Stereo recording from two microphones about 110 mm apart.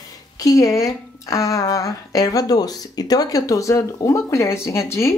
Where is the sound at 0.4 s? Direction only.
30° left (ahead or behind).